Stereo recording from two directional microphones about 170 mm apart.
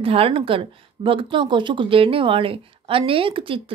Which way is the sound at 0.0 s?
35° right (ahead or behind).